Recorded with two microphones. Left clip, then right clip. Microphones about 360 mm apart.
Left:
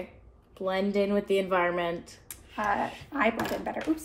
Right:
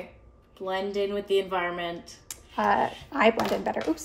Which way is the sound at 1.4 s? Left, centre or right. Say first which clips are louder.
Left 2 dB; centre.